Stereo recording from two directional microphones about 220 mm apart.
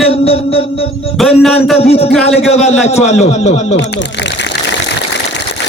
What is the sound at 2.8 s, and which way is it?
Speech, 30° left (ahead or behind).